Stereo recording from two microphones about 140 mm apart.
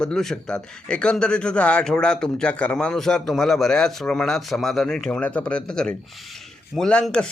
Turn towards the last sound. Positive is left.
turn(degrees=5)  # may be behind; listen again after turning